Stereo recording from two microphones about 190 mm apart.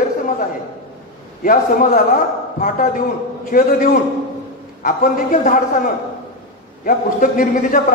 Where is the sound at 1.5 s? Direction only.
45° left (ahead or behind).